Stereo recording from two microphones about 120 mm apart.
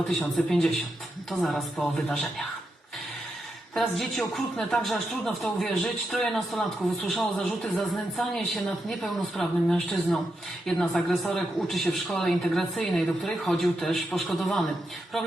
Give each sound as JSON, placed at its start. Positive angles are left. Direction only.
{"t": 0.0, "sound": "a man's voice", "side_deg": 0}
{"t": 3.8, "sound": "a man's voice", "side_deg": 0}